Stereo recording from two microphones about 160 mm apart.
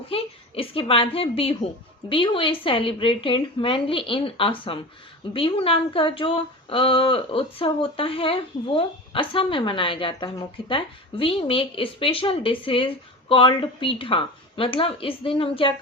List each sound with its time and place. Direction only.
0.1 s speech: 35° left (ahead or behind)